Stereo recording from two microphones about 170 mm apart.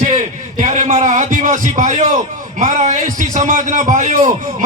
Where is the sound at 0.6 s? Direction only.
45° right (ahead or behind).